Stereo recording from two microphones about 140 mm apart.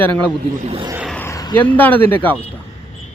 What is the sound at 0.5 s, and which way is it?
Speech, 50° right (ahead or behind).